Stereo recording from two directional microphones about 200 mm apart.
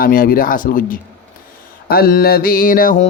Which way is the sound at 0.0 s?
45° left (ahead or behind).